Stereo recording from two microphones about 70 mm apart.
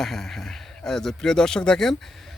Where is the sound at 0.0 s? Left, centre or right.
Centre.